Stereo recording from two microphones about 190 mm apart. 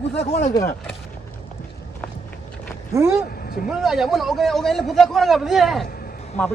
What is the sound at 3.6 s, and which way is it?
A man's voice, centre (ahead or behind).